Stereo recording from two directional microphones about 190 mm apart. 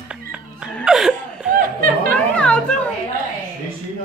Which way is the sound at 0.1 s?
5° right (ahead or behind).